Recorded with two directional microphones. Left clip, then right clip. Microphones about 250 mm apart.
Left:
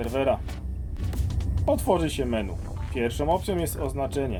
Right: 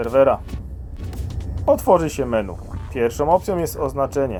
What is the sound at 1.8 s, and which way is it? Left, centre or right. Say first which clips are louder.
Speech: right 8 dB; centre.